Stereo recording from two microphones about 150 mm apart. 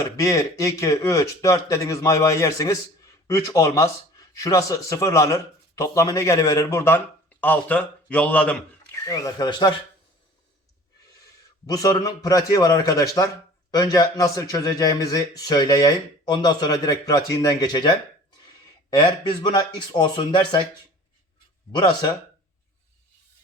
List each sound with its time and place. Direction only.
0.2 s a man's voice: 20° left (ahead or behind)
9.0 s a man's voice: 25° left (ahead or behind)
11.6 s a man's voice: 25° left (ahead or behind)
21.8 s speech: 30° left (ahead or behind)